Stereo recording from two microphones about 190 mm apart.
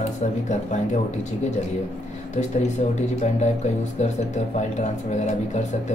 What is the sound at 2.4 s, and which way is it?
Speech, 35° left (ahead or behind).